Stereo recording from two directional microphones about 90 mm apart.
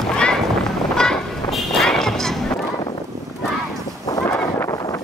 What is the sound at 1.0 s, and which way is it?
Music, 5° left (ahead or behind).